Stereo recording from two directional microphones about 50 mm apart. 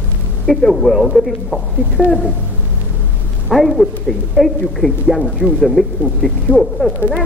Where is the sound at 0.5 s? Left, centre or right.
Centre.